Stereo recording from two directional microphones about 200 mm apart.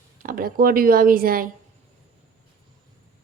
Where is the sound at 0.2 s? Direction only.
45° right (ahead or behind).